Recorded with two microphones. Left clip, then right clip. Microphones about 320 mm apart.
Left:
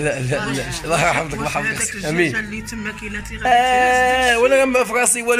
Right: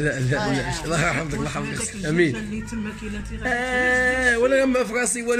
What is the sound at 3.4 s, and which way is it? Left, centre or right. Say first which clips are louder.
Speech: left 8 dB; centre.